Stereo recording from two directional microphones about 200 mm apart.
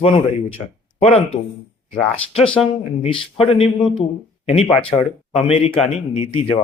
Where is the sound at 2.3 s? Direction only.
30° left (ahead or behind).